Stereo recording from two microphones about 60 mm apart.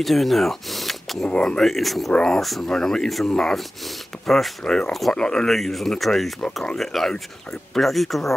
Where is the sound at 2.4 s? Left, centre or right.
Centre.